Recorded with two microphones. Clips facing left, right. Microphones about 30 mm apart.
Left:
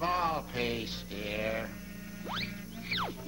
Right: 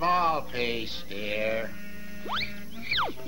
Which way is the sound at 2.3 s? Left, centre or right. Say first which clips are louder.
Right 6 dB; right.